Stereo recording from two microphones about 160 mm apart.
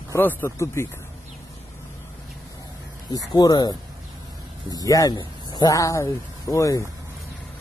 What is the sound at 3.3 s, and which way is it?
Speech, 25° left (ahead or behind).